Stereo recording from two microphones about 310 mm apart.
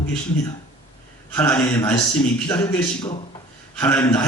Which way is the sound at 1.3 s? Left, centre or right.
Centre.